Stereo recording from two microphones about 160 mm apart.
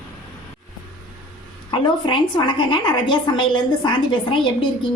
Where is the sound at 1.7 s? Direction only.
30° left (ahead or behind).